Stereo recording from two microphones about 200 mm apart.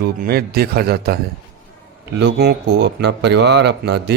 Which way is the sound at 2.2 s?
55° right (ahead or behind).